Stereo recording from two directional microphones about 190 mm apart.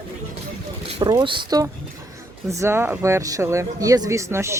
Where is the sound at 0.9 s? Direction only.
25° right (ahead or behind).